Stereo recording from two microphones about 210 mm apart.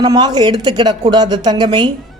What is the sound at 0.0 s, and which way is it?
A man's voice, 20° right (ahead or behind).